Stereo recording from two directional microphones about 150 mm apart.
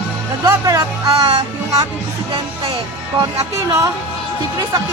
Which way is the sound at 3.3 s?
20° right (ahead or behind).